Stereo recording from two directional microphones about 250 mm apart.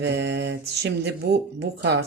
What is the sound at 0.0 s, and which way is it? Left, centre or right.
Speech, right.